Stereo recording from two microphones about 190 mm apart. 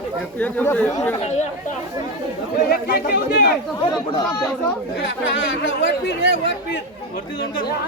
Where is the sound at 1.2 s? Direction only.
35° left (ahead or behind).